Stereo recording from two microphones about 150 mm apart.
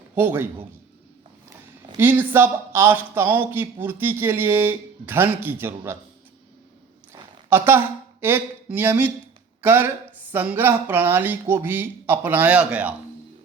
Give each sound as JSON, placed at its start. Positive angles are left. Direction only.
{"t": 0.2, "sound": "speech", "side_deg": -15}
{"t": 2.0, "sound": "speech", "side_deg": -15}
{"t": 7.5, "sound": "speech", "side_deg": -15}